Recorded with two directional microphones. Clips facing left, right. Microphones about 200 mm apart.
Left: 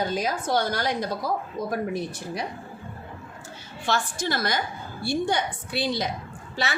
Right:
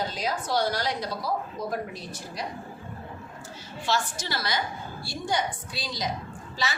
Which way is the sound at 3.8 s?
55° left (ahead or behind).